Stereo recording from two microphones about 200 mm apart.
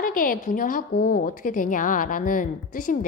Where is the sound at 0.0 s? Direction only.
45° left (ahead or behind).